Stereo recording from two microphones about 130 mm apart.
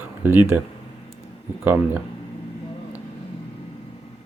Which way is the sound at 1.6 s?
15° right (ahead or behind).